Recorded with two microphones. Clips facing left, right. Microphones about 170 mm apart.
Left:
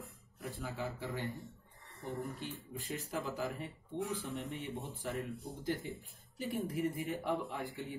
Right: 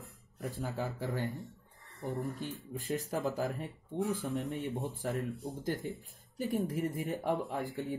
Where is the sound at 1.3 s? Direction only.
Centre (ahead or behind).